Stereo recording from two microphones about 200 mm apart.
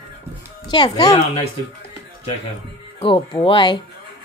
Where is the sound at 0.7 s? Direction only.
20° left (ahead or behind).